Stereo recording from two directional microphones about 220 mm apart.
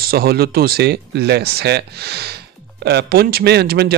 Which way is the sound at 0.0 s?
45° right (ahead or behind).